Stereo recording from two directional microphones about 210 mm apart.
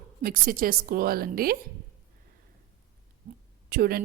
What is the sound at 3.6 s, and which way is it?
Speech, 45° right (ahead or behind).